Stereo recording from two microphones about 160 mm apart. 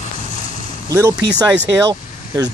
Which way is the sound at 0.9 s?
15° right (ahead or behind).